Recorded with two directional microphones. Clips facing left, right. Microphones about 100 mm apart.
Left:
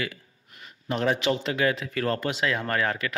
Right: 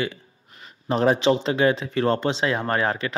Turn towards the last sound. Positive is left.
turn(degrees=-30)  # may be behind; listen again after turning